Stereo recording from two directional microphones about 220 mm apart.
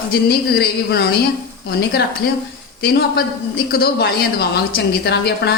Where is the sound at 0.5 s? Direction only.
45° left (ahead or behind).